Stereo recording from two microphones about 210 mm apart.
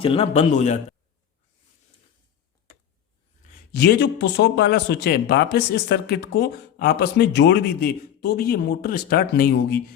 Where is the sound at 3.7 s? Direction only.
50° left (ahead or behind).